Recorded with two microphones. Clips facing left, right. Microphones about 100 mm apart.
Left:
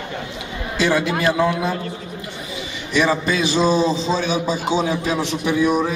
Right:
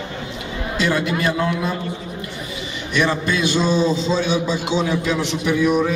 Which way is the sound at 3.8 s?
40° left (ahead or behind).